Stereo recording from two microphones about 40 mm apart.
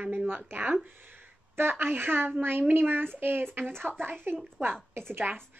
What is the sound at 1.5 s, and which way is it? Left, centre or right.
Speech, right.